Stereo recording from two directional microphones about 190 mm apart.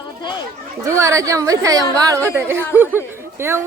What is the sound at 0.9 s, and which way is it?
A woman's voice, 15° right (ahead or behind).